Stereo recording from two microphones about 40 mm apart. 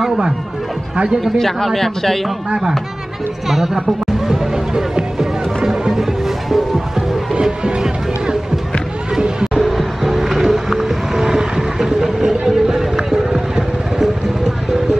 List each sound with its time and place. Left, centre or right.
0.9 s speech: centre
1.2 s speech: centre
3.4 s speech: centre
4.3 s music: centre
7.0 s music: centre
9.2 s a sound: centre
9.6 s music: centre